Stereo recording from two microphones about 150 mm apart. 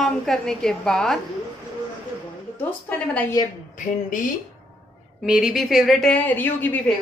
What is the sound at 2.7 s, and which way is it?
Speech, 10° left (ahead or behind).